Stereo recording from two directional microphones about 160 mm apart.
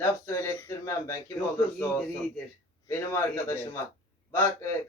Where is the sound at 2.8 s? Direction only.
15° left (ahead or behind).